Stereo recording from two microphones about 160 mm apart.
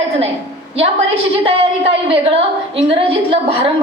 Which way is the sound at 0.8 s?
35° right (ahead or behind).